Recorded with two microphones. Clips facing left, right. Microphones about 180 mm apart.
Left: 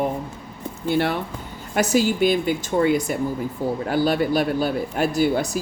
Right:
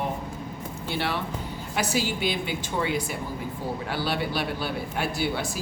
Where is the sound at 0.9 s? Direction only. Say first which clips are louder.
Left 8 dB; 50° left (ahead or behind).